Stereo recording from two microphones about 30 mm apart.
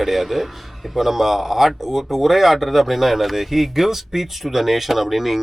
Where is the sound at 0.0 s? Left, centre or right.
Centre.